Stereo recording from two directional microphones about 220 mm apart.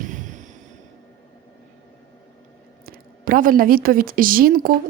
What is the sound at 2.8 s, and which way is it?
A woman's voice, 40° right (ahead or behind).